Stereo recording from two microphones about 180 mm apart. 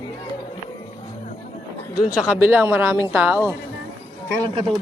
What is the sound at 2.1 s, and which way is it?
Speech, 10° right (ahead or behind).